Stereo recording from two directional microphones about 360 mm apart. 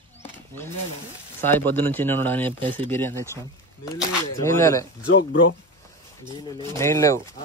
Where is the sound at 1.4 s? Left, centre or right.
Centre.